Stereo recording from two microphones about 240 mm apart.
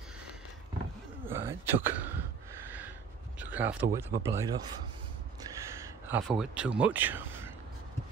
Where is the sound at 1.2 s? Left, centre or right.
Centre.